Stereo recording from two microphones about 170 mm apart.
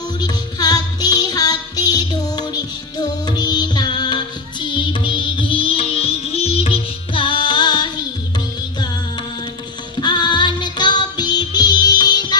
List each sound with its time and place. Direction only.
0.2 s music: 20° left (ahead or behind)
10.0 s music: 25° left (ahead or behind)